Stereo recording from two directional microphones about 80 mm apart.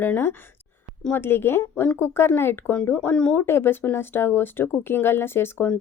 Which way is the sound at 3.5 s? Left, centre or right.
Left.